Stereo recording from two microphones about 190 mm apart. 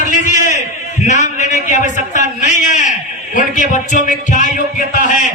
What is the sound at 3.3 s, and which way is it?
A man's voice, 40° left (ahead or behind).